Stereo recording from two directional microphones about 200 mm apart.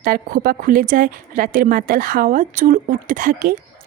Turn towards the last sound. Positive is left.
turn(degrees=-45)  # may be behind; listen again after turning